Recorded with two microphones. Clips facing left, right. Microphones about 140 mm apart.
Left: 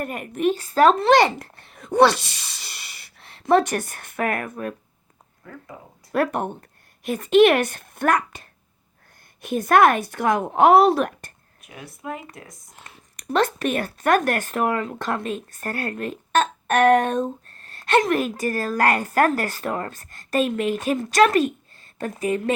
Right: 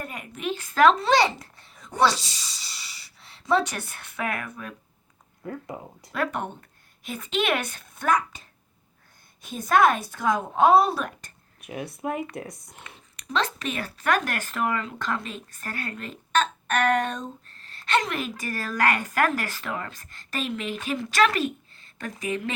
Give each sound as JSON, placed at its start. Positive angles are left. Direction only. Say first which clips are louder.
{"t": 0.0, "sound": "speech", "louder": "left 10 dB", "side_deg": 50}
{"t": 0.9, "sound": "a child's voice", "louder": "left 5 dB", "side_deg": 55}
{"t": 5.5, "sound": "speech", "louder": "right 6 dB", "side_deg": -35}
{"t": 6.1, "sound": "speech", "louder": "left 6 dB", "side_deg": 50}
{"t": 11.7, "sound": "speech", "louder": "right 4 dB", "side_deg": -25}
{"t": 13.2, "sound": "speech", "louder": "left 6 dB", "side_deg": 55}